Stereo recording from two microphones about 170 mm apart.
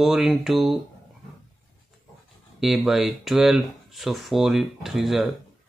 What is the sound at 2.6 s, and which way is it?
Speech, centre (ahead or behind).